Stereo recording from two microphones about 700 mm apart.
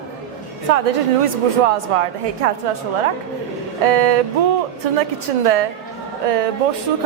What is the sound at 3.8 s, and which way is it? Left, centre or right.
Speech, right.